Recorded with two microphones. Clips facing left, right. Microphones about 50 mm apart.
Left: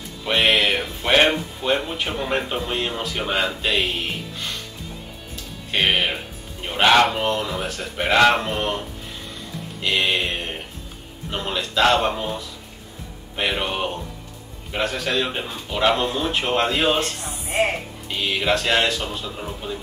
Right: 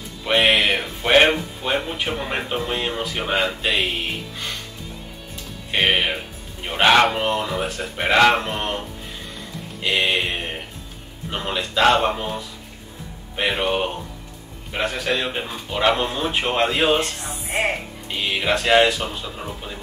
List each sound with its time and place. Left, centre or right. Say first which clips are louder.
0.2 s speech: right 1 dB; centre
5.7 s speech: right 1 dB; centre
9.8 s speech: right 1 dB; centre
15.0 s speech: even; centre
18.2 s speech: even; centre